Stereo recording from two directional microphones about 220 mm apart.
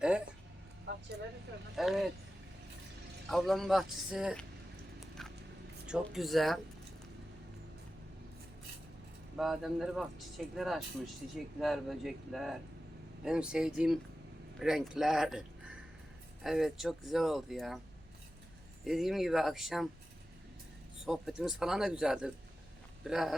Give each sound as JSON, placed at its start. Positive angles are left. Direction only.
{"t": 0.9, "sound": "a sound", "side_deg": -50}
{"t": 1.7, "sound": "speech", "side_deg": 0}
{"t": 3.2, "sound": "speech", "side_deg": 0}
{"t": 5.8, "sound": "speech", "side_deg": 0}
{"t": 9.4, "sound": "speech", "side_deg": 0}
{"t": 18.9, "sound": "speech", "side_deg": 0}
{"t": 21.0, "sound": "speech", "side_deg": 0}